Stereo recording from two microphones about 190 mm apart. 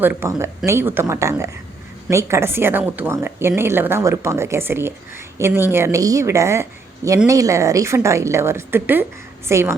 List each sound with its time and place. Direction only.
0.0 s speech: 10° right (ahead or behind)